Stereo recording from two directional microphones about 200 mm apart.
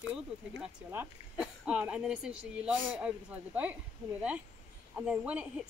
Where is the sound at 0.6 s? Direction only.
5° right (ahead or behind).